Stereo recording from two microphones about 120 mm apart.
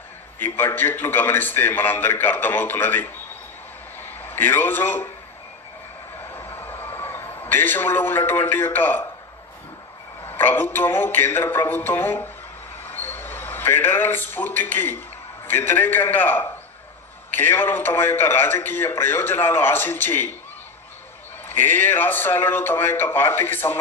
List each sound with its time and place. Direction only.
0.3 s a man's voice: 15° left (ahead or behind)
6.3 s a sound: 20° left (ahead or behind)
10.2 s a man's voice: 15° left (ahead or behind)
12.8 s a sound: 15° left (ahead or behind)
15.4 s a man's voice: 20° left (ahead or behind)
21.4 s a man's voice: 15° left (ahead or behind)